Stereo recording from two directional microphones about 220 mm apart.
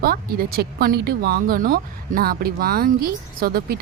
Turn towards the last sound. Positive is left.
turn(degrees=-45)  # may be behind; listen again after turning